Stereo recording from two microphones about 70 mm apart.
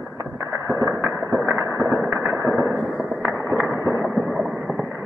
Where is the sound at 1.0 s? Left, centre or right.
Right.